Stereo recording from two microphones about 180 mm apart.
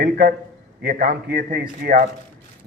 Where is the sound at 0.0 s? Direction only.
55° right (ahead or behind).